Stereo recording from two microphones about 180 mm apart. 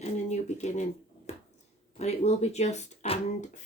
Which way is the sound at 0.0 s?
40° left (ahead or behind).